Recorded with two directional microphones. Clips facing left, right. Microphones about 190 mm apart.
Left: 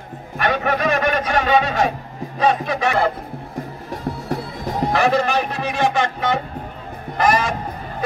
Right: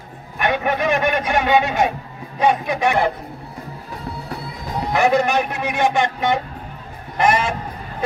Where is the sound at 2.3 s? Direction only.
20° right (ahead or behind).